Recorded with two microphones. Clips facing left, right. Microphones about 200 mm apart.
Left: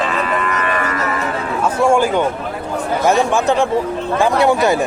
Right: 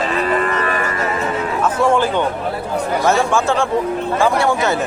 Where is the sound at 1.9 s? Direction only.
10° left (ahead or behind).